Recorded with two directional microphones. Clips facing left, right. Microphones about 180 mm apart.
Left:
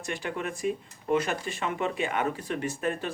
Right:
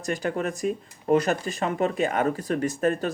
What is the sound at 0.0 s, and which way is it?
Speech, 40° right (ahead or behind).